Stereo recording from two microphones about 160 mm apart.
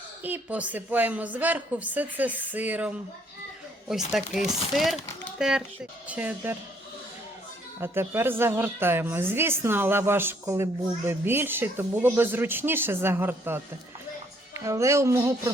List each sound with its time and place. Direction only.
0.2 s a woman's voice: 10° right (ahead or behind)
7.8 s a woman's voice: 15° right (ahead or behind)